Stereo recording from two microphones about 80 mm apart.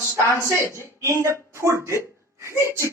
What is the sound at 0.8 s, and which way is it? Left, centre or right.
Speech, right.